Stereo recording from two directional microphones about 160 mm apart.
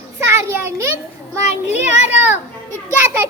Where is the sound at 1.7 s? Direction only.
45° left (ahead or behind).